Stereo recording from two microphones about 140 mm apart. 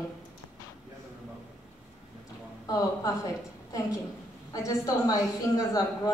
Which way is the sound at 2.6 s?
25° left (ahead or behind).